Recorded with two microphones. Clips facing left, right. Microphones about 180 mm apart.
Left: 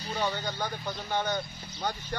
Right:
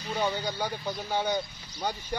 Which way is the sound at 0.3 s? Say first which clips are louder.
Right 2 dB; 10° right (ahead or behind).